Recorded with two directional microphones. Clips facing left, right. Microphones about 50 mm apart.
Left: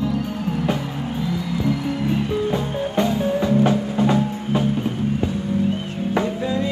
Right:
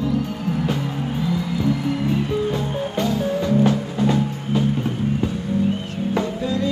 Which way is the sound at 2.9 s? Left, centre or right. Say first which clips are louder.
Left 3 dB; left.